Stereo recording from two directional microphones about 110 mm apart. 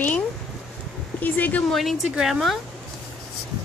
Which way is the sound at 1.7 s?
Centre (ahead or behind).